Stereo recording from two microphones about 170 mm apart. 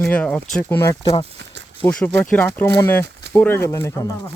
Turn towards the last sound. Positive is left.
turn(degrees=20)  # may be behind; listen again after turning